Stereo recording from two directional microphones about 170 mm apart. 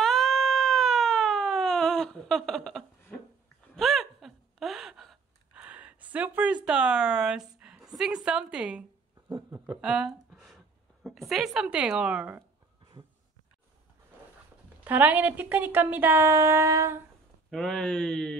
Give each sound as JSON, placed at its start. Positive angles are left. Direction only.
{"t": 0.0, "sound": "a sound", "side_deg": 0}
{"t": 8.3, "sound": "speech", "side_deg": -5}
{"t": 9.7, "sound": "a sound", "side_deg": -5}
{"t": 11.1, "sound": "a woman's voice", "side_deg": 0}
{"t": 14.9, "sound": "speech", "side_deg": -10}
{"t": 17.5, "sound": "a woman's voice", "side_deg": 0}